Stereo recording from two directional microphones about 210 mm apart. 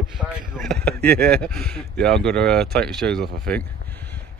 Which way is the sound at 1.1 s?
45° right (ahead or behind).